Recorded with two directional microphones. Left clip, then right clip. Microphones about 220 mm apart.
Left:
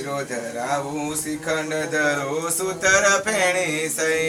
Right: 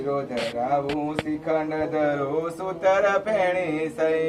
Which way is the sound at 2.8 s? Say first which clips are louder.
Left 2 dB; 40° left (ahead or behind).